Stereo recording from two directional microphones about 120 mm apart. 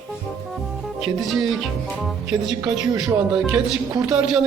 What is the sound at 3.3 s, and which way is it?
Speech, 5° right (ahead or behind).